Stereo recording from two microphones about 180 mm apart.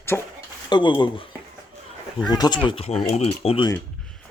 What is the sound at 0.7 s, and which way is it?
Speech, 25° left (ahead or behind).